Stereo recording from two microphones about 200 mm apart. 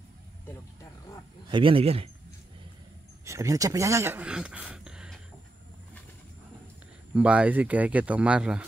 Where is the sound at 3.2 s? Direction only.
15° right (ahead or behind).